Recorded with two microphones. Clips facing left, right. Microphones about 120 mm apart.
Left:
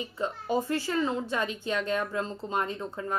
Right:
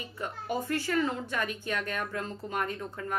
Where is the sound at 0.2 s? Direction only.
25° left (ahead or behind).